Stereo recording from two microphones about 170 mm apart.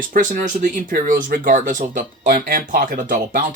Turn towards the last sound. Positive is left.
turn(degrees=-50)  # may be behind; listen again after turning